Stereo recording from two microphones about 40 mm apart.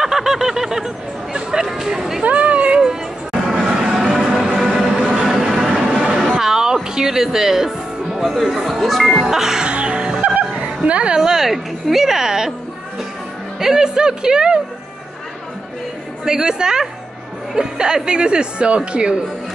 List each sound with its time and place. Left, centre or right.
0.0 s a sound: centre
2.2 s a sound: right
3.4 s a sound: centre
6.1 s music: centre
8.6 s speech: centre
9.3 s a woman's voice: centre
9.7 s music: right
11.1 s a woman's voice: centre
13.6 s a woman's voice: centre
16.3 s a woman's voice: centre